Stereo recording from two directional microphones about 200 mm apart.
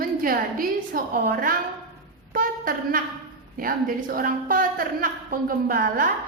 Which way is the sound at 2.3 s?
45° right (ahead or behind).